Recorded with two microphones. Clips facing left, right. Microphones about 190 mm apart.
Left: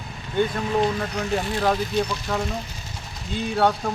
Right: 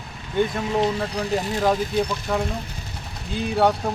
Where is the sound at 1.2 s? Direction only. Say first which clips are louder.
Right 1 dB; 35° right (ahead or behind).